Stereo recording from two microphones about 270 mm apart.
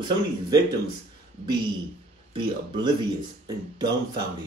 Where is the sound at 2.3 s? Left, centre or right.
Centre.